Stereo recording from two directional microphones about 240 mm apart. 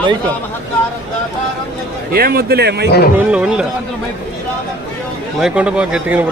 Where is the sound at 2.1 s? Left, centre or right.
Right.